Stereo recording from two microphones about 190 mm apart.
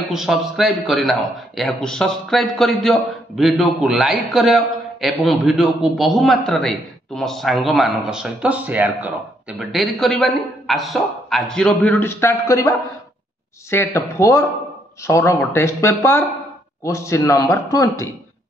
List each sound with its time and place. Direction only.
0.1 s a man's voice: centre (ahead or behind); by 18.0 s 15° left (ahead or behind)